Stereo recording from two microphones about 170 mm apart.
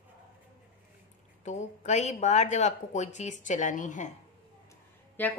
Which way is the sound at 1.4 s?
45° left (ahead or behind).